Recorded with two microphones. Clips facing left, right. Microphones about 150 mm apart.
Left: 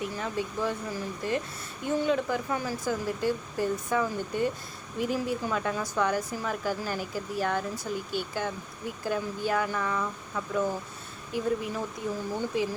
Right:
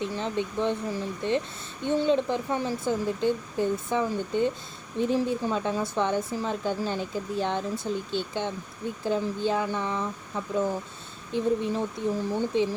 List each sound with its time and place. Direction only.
0.0 s speech: 25° right (ahead or behind)